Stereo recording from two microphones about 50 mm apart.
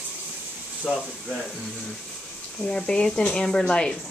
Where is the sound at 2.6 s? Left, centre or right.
Centre.